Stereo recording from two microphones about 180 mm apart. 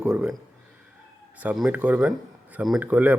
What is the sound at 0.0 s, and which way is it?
Speech, 5° right (ahead or behind).